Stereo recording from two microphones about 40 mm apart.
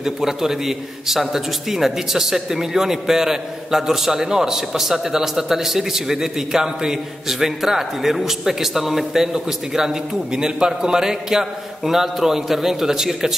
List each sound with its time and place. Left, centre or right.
0.0 s a man's voice: centre